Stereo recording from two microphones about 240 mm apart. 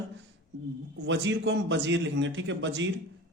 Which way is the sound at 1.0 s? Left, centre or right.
Right.